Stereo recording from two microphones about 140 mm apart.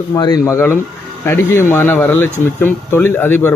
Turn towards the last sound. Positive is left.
turn(degrees=15)  # may be behind; listen again after turning